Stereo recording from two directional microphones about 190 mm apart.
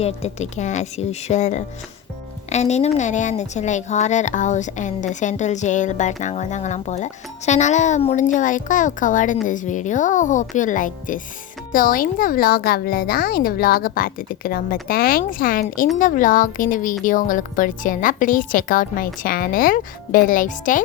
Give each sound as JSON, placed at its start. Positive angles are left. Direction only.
{"t": 0.0, "sound": "speech", "side_deg": 35}